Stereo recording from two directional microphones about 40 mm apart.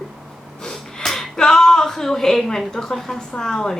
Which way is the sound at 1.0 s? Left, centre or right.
Centre.